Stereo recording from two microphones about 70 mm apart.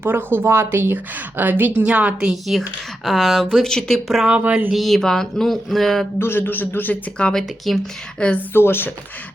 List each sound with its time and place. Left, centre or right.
0.0 s a woman's voice: right
2.2 s a woman's voice: centre
4.1 s speech: centre
4.4 s a woman's voice: right
4.7 s a woman's voice: centre
6.1 s a man's voice: left
7.2 s speech: centre
7.7 s a woman's voice: centre
8.2 s speech: centre
8.5 s speech: left